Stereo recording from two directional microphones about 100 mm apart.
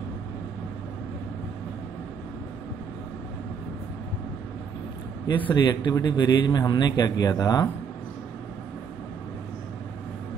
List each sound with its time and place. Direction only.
5.5 s a man's voice: 45° left (ahead or behind)